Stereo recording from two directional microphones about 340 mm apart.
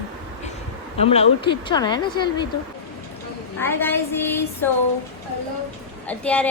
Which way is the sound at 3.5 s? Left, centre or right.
Centre.